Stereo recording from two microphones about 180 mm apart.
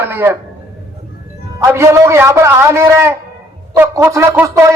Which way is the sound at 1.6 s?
15° right (ahead or behind).